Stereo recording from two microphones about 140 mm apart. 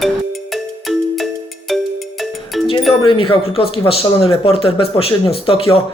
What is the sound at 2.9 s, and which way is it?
A man's voice, 40° left (ahead or behind).